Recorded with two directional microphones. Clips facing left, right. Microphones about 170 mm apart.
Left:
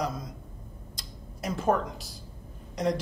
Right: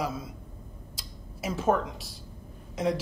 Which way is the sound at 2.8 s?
5° right (ahead or behind).